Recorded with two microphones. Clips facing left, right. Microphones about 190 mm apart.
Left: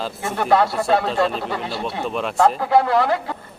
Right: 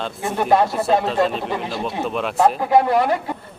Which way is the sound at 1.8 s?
Centre (ahead or behind).